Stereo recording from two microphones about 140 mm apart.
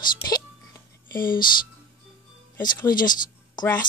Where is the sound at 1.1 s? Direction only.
90° left.